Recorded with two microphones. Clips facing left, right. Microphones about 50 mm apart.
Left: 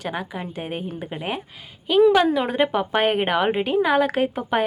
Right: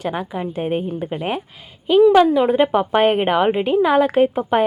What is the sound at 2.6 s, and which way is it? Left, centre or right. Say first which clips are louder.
Speech: right 4 dB; right.